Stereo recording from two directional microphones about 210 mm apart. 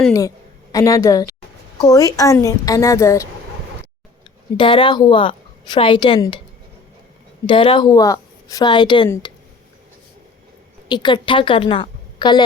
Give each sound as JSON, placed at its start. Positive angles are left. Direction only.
{"t": 0.1, "sound": "a woman's voice", "side_deg": 15}
{"t": 4.5, "sound": "a woman's voice", "side_deg": 25}
{"t": 7.4, "sound": "a woman's voice", "side_deg": 25}
{"t": 9.0, "sound": "a woman's voice", "side_deg": 10}
{"t": 10.8, "sound": "a woman's voice", "side_deg": 20}